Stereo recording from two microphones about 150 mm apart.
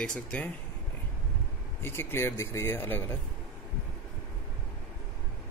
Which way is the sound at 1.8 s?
15° left (ahead or behind).